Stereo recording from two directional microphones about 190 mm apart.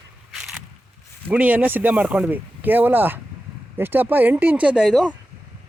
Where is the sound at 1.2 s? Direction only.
10° right (ahead or behind).